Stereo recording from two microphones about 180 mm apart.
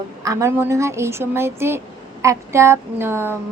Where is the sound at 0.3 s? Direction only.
15° right (ahead or behind).